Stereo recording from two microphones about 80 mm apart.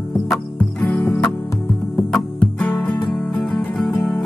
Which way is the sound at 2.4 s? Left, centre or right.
Centre.